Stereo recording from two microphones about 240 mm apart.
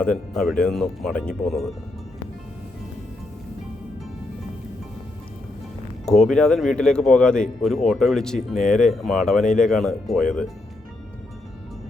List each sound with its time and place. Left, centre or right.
0.0 s speech: centre
6.1 s speech: centre